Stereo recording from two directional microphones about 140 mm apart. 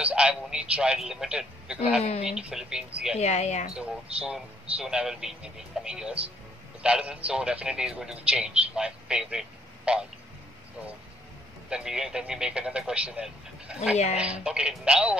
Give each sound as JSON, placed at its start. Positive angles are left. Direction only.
{"t": 0.0, "sound": "a man's voice", "side_deg": -10}
{"t": 3.2, "sound": "speech", "side_deg": 50}
{"t": 3.6, "sound": "a man's voice", "side_deg": -5}
{"t": 11.7, "sound": "a man's voice", "side_deg": -5}